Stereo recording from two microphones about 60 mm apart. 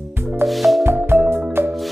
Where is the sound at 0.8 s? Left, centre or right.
Right.